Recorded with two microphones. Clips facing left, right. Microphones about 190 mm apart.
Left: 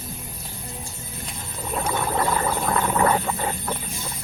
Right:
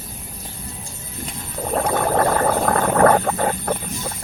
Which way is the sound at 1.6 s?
55° right (ahead or behind).